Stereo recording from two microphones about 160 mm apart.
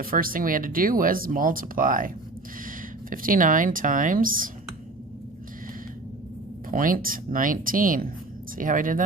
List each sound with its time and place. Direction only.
0.0 s speech: 65° right (ahead or behind)
6.7 s speech: 60° right (ahead or behind)